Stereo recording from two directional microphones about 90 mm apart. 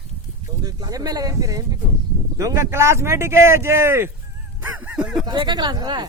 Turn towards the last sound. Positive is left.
turn(degrees=-50)  # may be behind; listen again after turning